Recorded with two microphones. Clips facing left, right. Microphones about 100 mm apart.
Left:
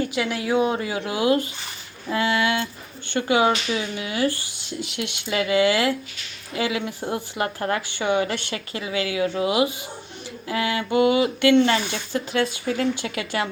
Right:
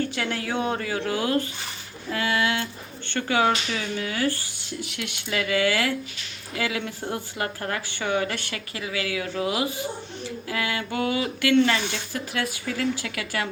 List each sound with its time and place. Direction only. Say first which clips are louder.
0.1 s speech: left 5 dB; 10° left (ahead or behind)
2.0 s speech: left 3 dB; 25° left (ahead or behind)